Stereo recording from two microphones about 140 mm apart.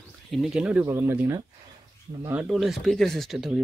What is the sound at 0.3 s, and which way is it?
Speech, centre (ahead or behind).